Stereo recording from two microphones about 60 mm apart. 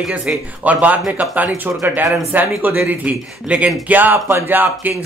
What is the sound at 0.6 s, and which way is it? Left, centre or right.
Speech, right.